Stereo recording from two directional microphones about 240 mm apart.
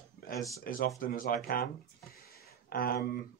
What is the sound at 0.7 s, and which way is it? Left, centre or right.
Speech, left.